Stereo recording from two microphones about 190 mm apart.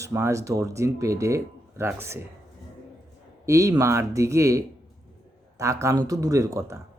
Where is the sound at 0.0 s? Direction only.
15° right (ahead or behind).